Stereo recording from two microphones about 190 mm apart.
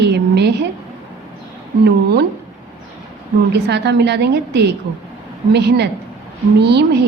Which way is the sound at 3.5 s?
60° right (ahead or behind).